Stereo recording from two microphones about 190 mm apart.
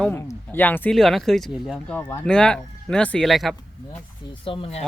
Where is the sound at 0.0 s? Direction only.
15° left (ahead or behind).